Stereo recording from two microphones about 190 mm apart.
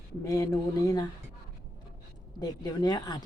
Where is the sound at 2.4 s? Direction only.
20° left (ahead or behind).